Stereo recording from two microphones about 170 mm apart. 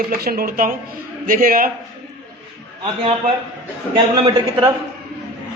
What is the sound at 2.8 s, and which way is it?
Speech, 30° right (ahead or behind).